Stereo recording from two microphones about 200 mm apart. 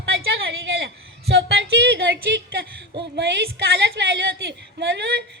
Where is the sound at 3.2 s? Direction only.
55° right (ahead or behind).